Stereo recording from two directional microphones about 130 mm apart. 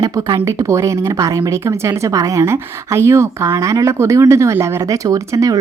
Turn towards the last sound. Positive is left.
turn(degrees=-25)  # may be behind; listen again after turning